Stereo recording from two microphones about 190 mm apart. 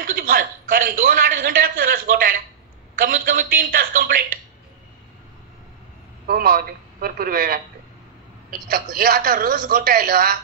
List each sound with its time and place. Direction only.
0.0 s a man's voice: 50° right (ahead or behind)
6.2 s a woman's voice: 50° right (ahead or behind)